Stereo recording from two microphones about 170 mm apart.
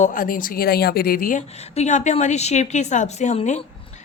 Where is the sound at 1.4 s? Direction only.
40° left (ahead or behind).